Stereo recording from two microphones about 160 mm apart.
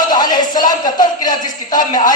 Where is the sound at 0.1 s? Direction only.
25° left (ahead or behind).